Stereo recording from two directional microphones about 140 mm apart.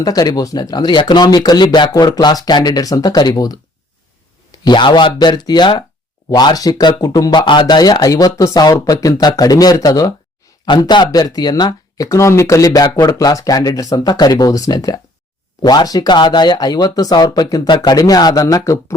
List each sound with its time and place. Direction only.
0.0 s speech: 25° left (ahead or behind)
12.0 s speech: 20° left (ahead or behind)